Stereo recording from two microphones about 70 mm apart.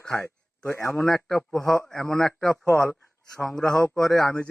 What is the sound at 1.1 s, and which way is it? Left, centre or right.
A man's voice, centre.